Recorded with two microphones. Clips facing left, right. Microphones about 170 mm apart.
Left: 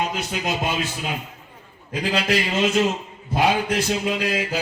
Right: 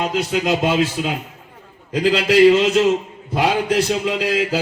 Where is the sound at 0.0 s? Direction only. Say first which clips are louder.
Right 6 dB; 90° right.